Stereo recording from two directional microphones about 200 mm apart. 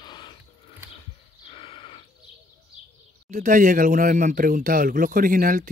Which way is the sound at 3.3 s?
40° right (ahead or behind).